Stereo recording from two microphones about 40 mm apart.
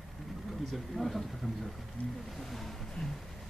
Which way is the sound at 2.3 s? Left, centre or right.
Centre.